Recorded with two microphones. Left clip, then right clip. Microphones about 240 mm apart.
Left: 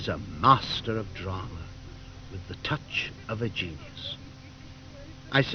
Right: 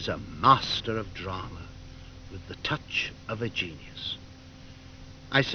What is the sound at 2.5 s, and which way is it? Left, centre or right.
Speech, centre.